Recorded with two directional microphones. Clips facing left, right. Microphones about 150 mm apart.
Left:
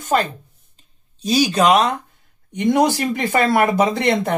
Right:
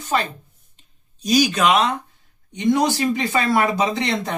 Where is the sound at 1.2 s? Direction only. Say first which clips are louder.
Left 2 dB; 30° left (ahead or behind).